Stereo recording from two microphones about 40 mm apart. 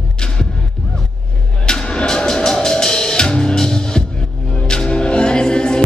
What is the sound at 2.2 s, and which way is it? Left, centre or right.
Music, centre.